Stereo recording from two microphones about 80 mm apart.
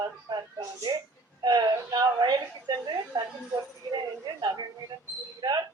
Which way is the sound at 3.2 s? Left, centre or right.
Right.